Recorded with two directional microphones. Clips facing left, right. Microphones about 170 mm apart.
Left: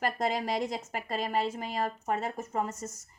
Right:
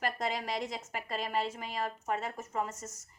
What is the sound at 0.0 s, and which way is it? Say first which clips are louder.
Speech: left 4 dB; 40° left (ahead or behind).